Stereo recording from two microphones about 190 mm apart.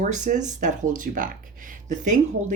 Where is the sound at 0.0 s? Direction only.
40° right (ahead or behind).